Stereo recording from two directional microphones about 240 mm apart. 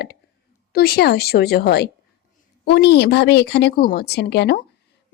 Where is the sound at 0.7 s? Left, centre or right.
Left.